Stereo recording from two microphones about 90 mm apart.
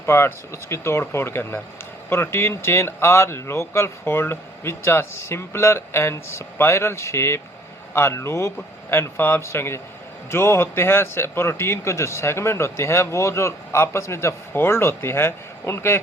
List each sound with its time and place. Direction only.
0.0 s a man's voice: 30° left (ahead or behind)